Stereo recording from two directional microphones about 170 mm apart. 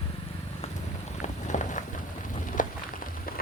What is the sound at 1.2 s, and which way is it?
Walk, 45° left (ahead or behind).